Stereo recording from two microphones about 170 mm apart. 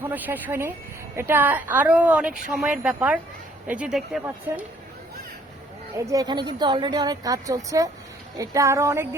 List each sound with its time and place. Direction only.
0.0 s a woman's voice: 10° right (ahead or behind)
6.1 s a woman's voice: 25° right (ahead or behind)